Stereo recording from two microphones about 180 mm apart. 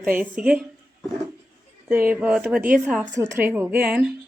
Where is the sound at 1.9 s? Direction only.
10° right (ahead or behind).